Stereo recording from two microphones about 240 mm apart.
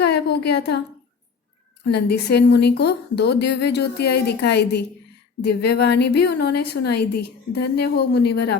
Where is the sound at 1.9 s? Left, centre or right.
Left.